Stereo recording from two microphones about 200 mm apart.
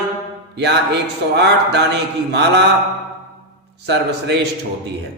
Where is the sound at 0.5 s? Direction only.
55° right (ahead or behind).